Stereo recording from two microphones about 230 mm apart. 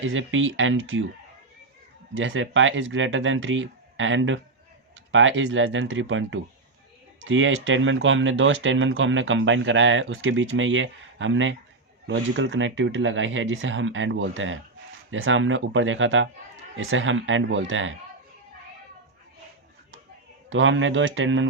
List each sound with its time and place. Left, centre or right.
0.0 s speech: right
2.1 s speech: right
20.5 s speech: right